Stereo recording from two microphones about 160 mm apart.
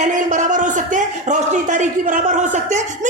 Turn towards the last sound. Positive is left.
turn(degrees=-50)  # may be behind; listen again after turning